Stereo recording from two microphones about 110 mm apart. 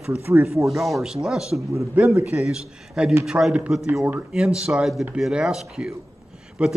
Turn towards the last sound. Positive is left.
turn(degrees=-10)  # may be behind; listen again after turning